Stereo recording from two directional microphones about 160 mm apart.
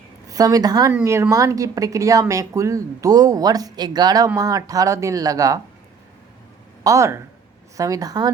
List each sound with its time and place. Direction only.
0.3 s speech: 20° right (ahead or behind)
6.8 s speech: 20° right (ahead or behind)